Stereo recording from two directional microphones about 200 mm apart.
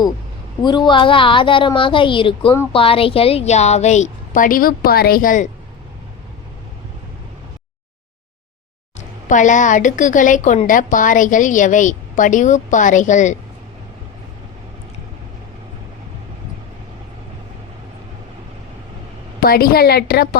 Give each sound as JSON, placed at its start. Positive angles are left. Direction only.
{"t": 0.6, "sound": "a woman's voice", "side_deg": 20}
{"t": 9.0, "sound": "a woman's voice", "side_deg": 40}
{"t": 19.4, "sound": "a woman's voice", "side_deg": 50}